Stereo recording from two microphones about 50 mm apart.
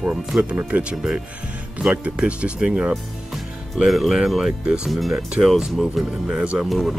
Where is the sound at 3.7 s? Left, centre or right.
Centre.